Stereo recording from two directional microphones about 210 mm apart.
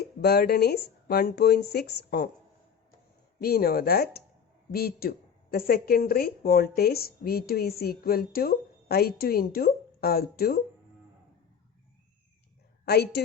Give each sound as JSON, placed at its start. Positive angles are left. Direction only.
{"t": 0.0, "sound": "speech", "side_deg": 50}
{"t": 3.4, "sound": "speech", "side_deg": 45}
{"t": 12.8, "sound": "a woman's voice", "side_deg": 50}